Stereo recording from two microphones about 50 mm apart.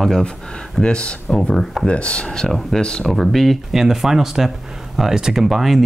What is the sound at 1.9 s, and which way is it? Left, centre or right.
Speech, left.